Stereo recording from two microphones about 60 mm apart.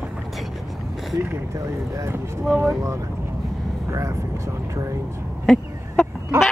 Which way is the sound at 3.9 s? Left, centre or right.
Right.